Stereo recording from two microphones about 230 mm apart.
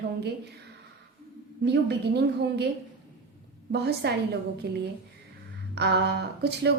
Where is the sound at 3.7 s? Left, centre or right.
Right.